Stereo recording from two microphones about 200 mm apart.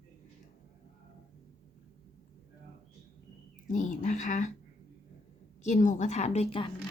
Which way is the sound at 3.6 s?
40° left (ahead or behind).